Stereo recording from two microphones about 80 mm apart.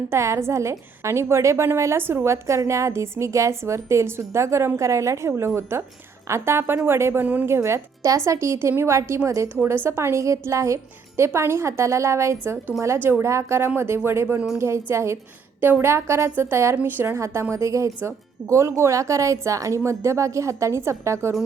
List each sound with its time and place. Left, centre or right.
0.1 s a woman's voice: right